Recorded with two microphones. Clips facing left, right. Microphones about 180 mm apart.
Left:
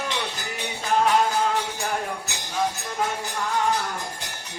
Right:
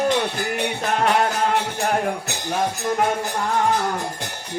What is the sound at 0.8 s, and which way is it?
Music, 65° right (ahead or behind).